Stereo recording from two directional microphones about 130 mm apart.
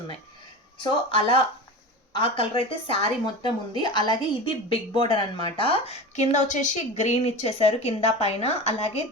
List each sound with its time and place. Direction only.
0.8 s a woman's voice: 35° left (ahead or behind); by 9.0 s 50° left (ahead or behind)